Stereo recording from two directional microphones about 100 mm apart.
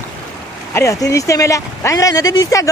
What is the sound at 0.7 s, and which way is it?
Speech, 35° left (ahead or behind).